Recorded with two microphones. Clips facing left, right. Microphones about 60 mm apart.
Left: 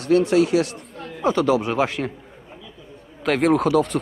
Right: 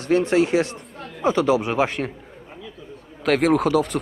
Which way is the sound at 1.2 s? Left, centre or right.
Centre.